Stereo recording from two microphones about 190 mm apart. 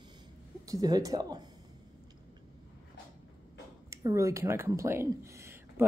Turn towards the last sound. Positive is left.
turn(degrees=-15)  # may be behind; listen again after turning